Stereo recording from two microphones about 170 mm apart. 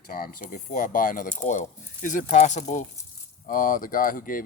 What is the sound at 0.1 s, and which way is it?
Speech, 55° left (ahead or behind).